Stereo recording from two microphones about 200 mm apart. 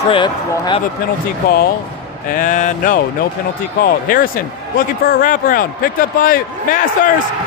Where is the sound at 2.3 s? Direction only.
40° left (ahead or behind).